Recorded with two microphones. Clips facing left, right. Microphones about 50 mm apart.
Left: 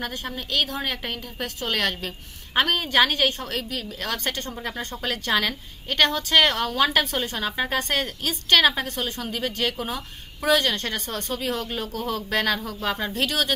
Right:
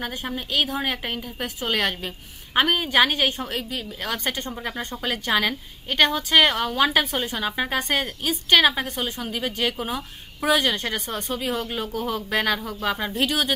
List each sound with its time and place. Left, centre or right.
0.0 s a woman's voice: centre